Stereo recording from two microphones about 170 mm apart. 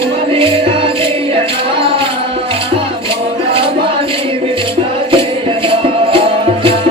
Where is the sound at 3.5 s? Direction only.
30° right (ahead or behind).